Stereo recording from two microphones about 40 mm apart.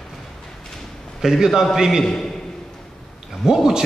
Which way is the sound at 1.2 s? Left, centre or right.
Centre.